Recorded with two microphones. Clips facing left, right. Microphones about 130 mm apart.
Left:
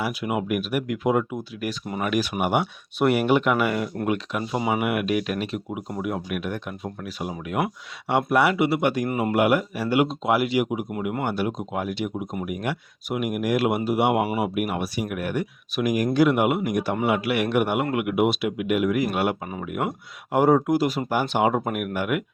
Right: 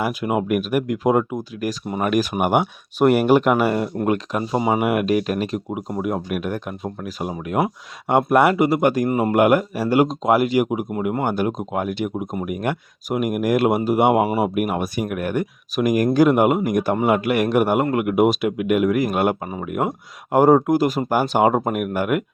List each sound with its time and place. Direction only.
0.0 s speech: 45° right (ahead or behind)
4.9 s speech: 40° right (ahead or behind)